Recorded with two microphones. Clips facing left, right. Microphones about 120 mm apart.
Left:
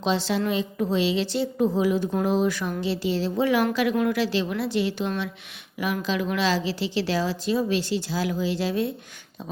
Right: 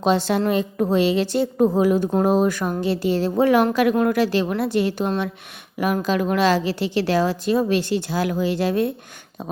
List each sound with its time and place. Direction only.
0.0 s a woman's voice: 50° right (ahead or behind)